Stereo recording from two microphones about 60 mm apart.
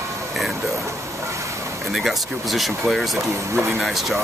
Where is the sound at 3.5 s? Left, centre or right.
Right.